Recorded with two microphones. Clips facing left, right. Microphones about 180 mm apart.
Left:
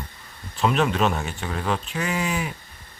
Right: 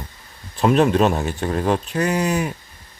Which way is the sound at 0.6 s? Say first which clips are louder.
Right 6 dB; 45° right (ahead or behind).